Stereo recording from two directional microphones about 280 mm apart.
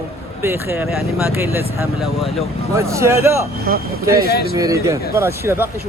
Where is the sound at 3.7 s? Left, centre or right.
Right.